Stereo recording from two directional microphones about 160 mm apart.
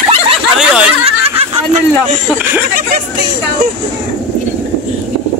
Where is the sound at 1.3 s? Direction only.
45° right (ahead or behind).